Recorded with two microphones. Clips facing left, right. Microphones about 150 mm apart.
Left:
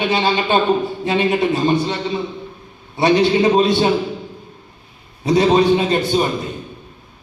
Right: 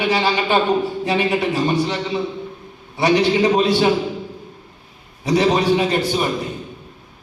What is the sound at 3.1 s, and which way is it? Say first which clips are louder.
Speech: left 2 dB; 20° left (ahead or behind).